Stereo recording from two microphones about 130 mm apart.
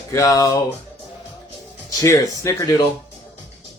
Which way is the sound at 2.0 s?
25° left (ahead or behind).